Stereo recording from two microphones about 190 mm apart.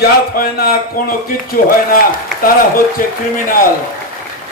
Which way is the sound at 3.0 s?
45° left (ahead or behind).